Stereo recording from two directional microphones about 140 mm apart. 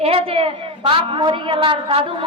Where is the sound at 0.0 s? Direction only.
45° right (ahead or behind).